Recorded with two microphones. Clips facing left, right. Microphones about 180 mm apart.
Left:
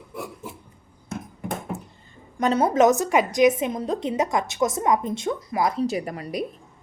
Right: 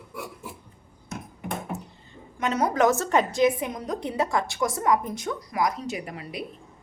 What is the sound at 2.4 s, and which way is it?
A woman's voice, 30° left (ahead or behind).